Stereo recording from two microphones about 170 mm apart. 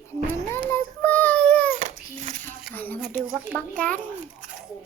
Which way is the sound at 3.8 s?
10° left (ahead or behind).